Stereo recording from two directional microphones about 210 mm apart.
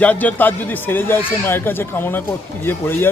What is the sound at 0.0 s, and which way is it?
Speech, 5° left (ahead or behind).